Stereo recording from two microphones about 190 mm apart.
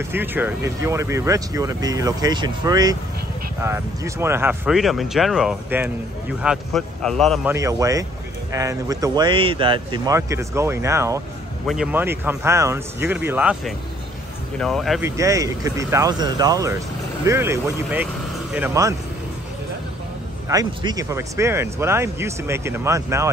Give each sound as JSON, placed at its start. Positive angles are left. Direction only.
{"t": 0.1, "sound": "speech", "side_deg": -10}
{"t": 7.4, "sound": "speech", "side_deg": -15}
{"t": 11.6, "sound": "speech", "side_deg": -5}
{"t": 15.0, "sound": "speech", "side_deg": -15}
{"t": 20.4, "sound": "speech", "side_deg": -20}